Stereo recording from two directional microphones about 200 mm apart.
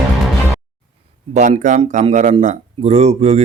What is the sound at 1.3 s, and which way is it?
Speech, 35° right (ahead or behind).